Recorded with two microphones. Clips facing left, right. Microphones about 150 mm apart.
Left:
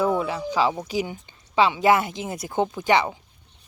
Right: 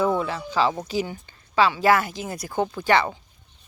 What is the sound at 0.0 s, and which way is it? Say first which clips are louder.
Speech: even; 10° left (ahead or behind).